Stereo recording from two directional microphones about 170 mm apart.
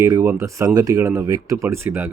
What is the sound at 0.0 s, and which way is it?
Speech, 15° right (ahead or behind).